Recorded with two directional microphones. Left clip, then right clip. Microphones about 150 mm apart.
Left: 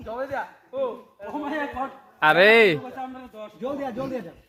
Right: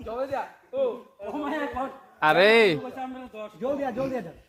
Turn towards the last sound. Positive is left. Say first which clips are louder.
# right 2 dB
turn(degrees=-5)  # may be behind; listen again after turning